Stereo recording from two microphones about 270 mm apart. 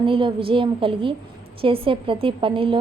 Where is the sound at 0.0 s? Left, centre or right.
Centre.